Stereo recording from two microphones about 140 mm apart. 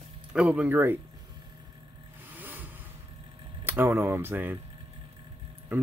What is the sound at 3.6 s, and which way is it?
Speech, 15° right (ahead or behind).